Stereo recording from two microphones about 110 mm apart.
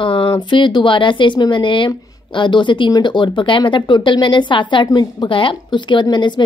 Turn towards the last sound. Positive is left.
turn(degrees=45)  # may be behind; listen again after turning